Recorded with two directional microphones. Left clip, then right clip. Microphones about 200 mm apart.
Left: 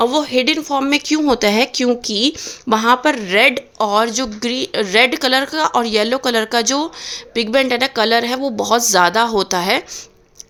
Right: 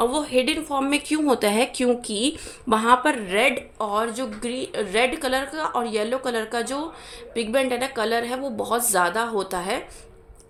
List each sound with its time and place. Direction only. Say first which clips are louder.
0.0 s speech: left 6 dB; 35° left (ahead or behind)